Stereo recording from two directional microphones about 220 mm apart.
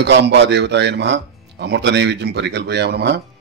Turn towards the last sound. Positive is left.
turn(degrees=-45)  # may be behind; listen again after turning